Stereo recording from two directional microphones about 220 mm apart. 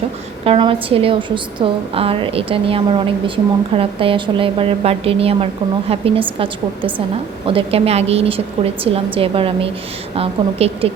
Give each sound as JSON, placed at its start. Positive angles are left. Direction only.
{"t": 0.4, "sound": "a woman's voice", "side_deg": -25}